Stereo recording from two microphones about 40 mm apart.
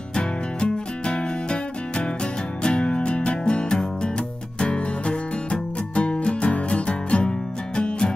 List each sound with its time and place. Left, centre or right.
0.1 s music: left